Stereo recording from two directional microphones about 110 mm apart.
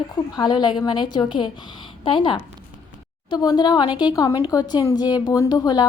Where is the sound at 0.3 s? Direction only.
40° left (ahead or behind).